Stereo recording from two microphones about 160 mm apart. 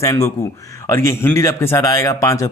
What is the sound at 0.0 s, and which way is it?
A man's voice, 15° left (ahead or behind).